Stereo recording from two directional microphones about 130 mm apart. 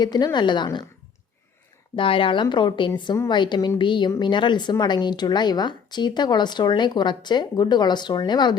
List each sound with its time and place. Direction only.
0.0 s speech: 35° left (ahead or behind)
2.0 s speech: 45° left (ahead or behind)